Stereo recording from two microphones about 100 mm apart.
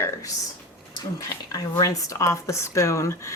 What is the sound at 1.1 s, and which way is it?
Speech, 35° left (ahead or behind).